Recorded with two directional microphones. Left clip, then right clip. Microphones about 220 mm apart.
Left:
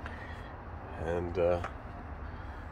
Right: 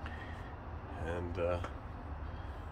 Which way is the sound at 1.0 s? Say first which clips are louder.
Left 7 dB; 30° left (ahead or behind).